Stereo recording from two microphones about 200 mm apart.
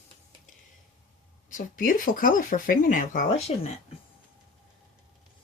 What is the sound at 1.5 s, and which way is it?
Speech, 40° left (ahead or behind).